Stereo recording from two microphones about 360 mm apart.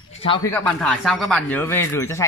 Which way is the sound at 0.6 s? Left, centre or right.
Centre.